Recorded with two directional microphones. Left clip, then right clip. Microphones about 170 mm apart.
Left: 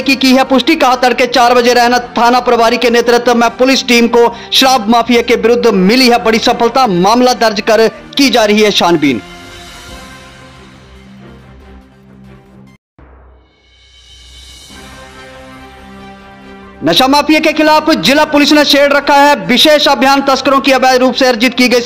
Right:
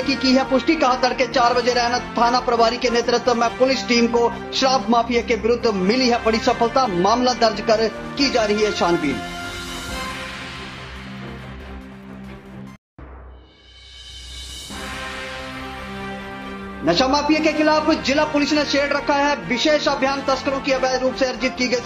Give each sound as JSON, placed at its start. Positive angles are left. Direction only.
{"t": 0.0, "sound": "speech", "side_deg": 75}
{"t": 16.8, "sound": "a man's voice", "side_deg": 85}